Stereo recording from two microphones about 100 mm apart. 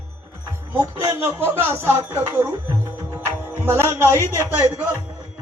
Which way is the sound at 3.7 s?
25° right (ahead or behind).